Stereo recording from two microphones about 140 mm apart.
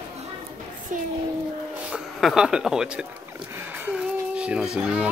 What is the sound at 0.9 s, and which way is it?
Child singing, 70° right (ahead or behind).